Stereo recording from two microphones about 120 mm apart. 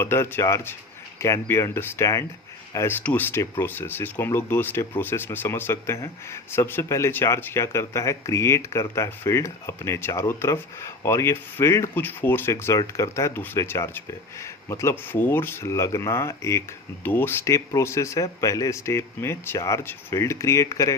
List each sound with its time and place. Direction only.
0.0 s speech: 20° left (ahead or behind)